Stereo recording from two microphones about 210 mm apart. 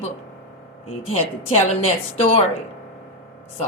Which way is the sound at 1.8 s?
30° left (ahead or behind).